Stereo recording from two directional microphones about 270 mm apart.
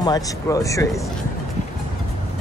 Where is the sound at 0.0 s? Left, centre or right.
Centre.